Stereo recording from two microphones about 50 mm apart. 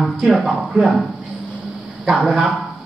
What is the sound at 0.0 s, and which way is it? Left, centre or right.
Speech, centre.